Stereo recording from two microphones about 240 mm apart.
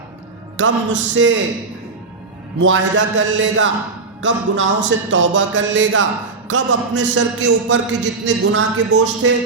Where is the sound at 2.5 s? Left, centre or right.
Right.